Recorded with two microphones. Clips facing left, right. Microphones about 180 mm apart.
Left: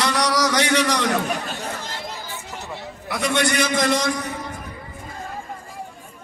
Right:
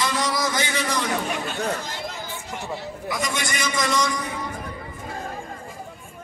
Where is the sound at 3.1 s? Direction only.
65° left (ahead or behind).